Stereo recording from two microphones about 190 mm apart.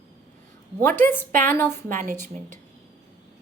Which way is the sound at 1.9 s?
40° right (ahead or behind).